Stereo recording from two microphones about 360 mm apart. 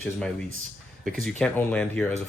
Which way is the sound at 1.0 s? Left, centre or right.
Centre.